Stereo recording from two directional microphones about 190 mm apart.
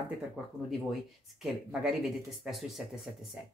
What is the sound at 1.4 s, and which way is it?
Speech, centre (ahead or behind).